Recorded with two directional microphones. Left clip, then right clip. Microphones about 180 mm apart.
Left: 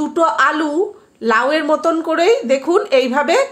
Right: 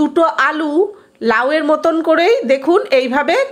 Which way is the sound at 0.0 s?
15° right (ahead or behind).